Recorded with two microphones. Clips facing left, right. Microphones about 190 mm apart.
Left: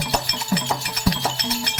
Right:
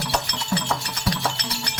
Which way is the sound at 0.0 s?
20° left (ahead or behind).